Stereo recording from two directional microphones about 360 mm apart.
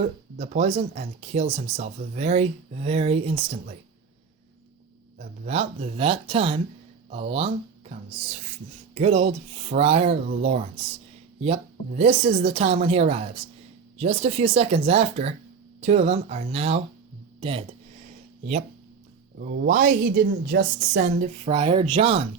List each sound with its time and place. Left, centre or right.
0.0 s speech: centre
5.1 s speech: centre
9.0 s speech: centre
19.4 s a woman's voice: right